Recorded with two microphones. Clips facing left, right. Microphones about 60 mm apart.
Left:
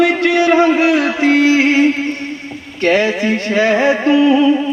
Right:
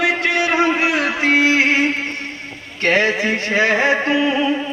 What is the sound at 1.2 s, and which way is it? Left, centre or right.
Music, right.